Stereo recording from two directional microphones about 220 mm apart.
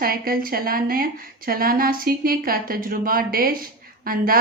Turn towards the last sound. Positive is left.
turn(degrees=-40)  # may be behind; listen again after turning